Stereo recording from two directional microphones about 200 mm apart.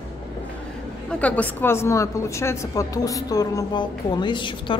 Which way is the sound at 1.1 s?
5° left (ahead or behind).